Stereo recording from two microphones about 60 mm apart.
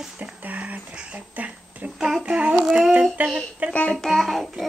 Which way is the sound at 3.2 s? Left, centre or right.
Right.